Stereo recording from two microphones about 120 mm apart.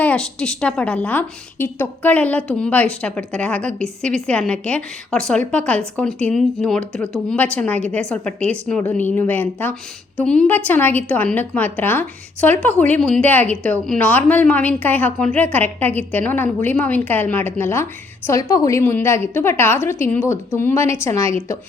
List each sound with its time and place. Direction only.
0.0 s a woman's voice: 10° left (ahead or behind)